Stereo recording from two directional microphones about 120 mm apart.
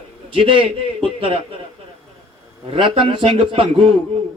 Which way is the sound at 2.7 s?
50° right (ahead or behind).